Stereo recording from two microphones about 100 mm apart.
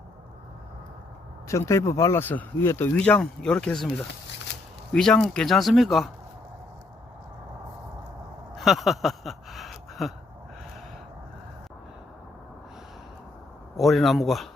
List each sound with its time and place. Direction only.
1.5 s speech: 30° left (ahead or behind)
3.0 s speech: 10° left (ahead or behind)
8.5 s a sound: centre (ahead or behind)
13.7 s speech: centre (ahead or behind)